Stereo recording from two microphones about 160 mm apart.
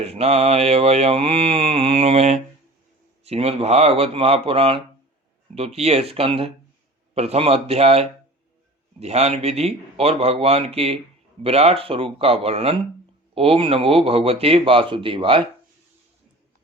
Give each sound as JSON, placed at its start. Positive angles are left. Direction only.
{"t": 0.0, "sound": "mantra", "side_deg": -40}